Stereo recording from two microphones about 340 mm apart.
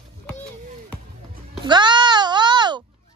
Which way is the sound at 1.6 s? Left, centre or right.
Centre.